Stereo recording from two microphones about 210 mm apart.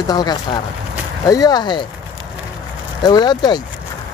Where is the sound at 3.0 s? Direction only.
20° left (ahead or behind).